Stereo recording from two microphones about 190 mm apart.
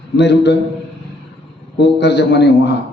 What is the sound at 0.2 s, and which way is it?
Speech, 65° left (ahead or behind).